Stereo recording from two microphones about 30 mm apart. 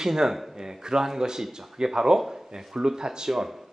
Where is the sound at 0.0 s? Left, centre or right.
Centre.